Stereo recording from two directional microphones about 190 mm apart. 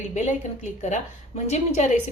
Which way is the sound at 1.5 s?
35° left (ahead or behind).